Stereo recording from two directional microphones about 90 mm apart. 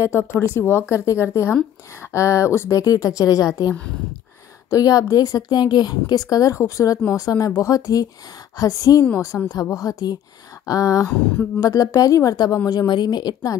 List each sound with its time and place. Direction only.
0.0 s a woman's voice: 30° left (ahead or behind)
2.8 s a woman's voice: 40° left (ahead or behind)
12.6 s speech: 50° left (ahead or behind)